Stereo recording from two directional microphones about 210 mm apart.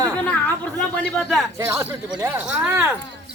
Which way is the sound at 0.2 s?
5° left (ahead or behind).